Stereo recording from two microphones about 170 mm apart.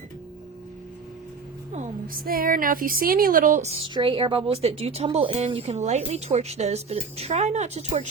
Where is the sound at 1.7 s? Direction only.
45° right (ahead or behind).